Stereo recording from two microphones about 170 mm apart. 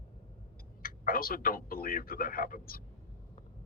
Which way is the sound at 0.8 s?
60° left (ahead or behind).